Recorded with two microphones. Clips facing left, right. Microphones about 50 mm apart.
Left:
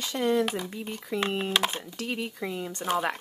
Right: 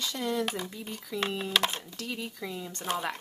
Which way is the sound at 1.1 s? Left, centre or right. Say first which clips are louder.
Left 3 dB; left.